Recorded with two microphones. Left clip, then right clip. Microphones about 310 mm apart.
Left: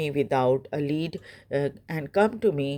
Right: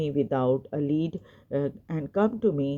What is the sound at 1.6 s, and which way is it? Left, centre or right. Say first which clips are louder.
Speech: left 1 dB; left.